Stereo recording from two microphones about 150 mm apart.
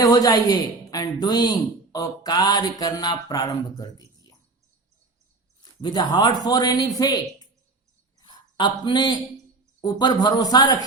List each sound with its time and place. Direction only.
0.0 s speech: 25° left (ahead or behind)
5.8 s speech: 30° left (ahead or behind)
8.2 s a sound: 30° left (ahead or behind)
8.8 s a man's voice: 30° left (ahead or behind)